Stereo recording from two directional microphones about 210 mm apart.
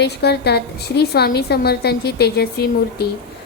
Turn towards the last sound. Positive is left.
turn(degrees=50)  # may be behind; listen again after turning